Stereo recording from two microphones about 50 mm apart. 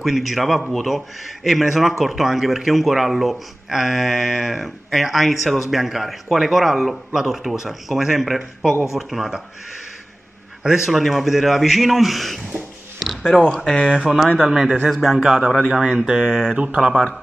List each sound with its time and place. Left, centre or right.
0.0 s speech: centre
10.6 s a man's voice: centre
11.0 s speech: centre
13.5 s speech: centre
14.4 s speech: centre
16.5 s speech: right